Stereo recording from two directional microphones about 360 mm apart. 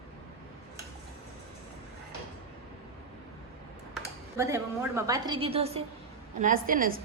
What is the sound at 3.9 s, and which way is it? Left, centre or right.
A woman's voice, centre.